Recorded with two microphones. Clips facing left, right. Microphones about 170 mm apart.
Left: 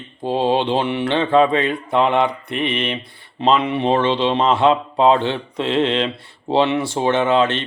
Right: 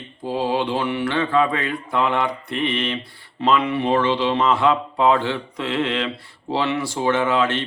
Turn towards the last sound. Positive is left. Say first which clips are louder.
# left 3 dB
turn(degrees=25)  # may be behind; listen again after turning